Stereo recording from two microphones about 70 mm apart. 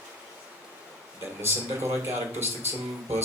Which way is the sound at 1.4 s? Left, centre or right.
Right.